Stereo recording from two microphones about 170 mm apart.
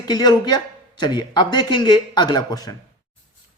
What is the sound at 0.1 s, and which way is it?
Speech, 25° left (ahead or behind).